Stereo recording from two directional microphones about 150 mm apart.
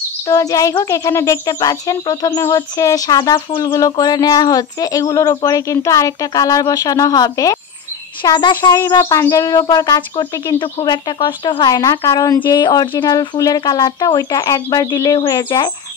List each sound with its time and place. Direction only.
0.3 s a child's voice: 20° left (ahead or behind)
8.8 s speech: 20° left (ahead or behind)